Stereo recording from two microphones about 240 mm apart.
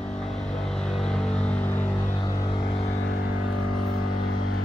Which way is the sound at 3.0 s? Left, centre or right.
Left.